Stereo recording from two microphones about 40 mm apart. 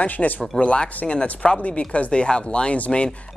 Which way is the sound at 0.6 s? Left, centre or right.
Left.